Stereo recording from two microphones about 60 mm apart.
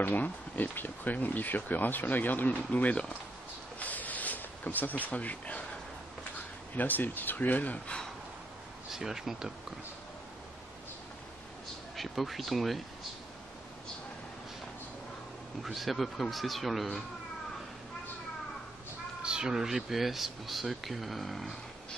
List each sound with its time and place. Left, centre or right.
0.0 s speech: left
3.8 s a sound: left
6.7 s speech: left
8.9 s speech: centre
12.0 s speech: centre
15.6 s speech: centre
19.2 s speech: centre